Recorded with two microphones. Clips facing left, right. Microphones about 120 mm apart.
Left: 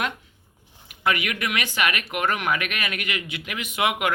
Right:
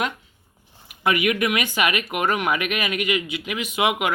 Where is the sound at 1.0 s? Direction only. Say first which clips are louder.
Right 4 dB; 15° right (ahead or behind).